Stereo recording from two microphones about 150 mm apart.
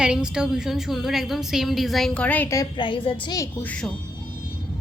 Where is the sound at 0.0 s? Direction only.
5° right (ahead or behind); by 2.6 s 15° left (ahead or behind).